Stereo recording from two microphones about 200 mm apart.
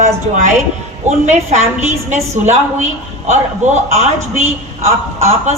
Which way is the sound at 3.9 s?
35° right (ahead or behind).